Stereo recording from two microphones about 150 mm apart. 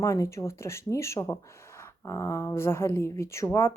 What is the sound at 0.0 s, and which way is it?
A woman's voice, 20° left (ahead or behind).